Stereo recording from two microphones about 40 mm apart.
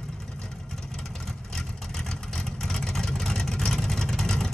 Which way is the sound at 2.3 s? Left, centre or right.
Centre.